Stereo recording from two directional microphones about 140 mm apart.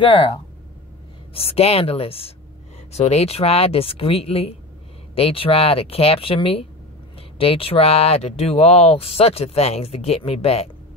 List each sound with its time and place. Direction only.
0.0 s speech: 35° left (ahead or behind)